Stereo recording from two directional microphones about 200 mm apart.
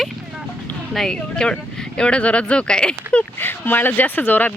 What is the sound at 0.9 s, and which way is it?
Speech, 5° left (ahead or behind).